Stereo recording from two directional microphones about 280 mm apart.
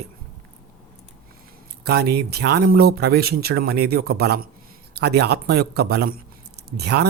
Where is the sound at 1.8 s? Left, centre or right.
Right.